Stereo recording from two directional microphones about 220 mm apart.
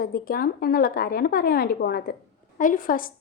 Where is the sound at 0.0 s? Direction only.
45° left (ahead or behind).